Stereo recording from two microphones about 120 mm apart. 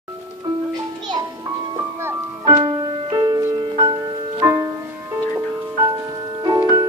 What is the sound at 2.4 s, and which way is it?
Music, 35° right (ahead or behind).